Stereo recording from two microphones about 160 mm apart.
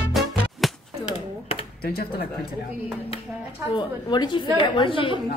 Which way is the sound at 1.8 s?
75° left (ahead or behind).